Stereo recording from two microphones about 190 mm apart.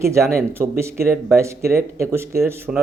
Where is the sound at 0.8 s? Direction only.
15° right (ahead or behind).